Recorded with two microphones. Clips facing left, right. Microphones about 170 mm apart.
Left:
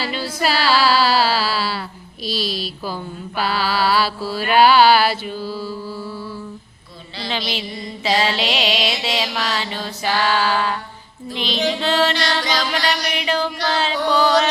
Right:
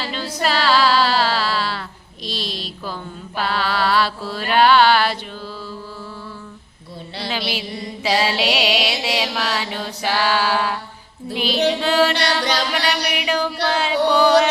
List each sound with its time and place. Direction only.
0.0 s female singing: 10° left (ahead or behind)
2.2 s mantra: 5° left (ahead or behind)
8.0 s music: 10° right (ahead or behind)
11.3 s female singing: 10° right (ahead or behind)
11.8 s music: 10° right (ahead or behind)
12.5 s music: 65° right (ahead or behind)
13.1 s music: 10° right (ahead or behind)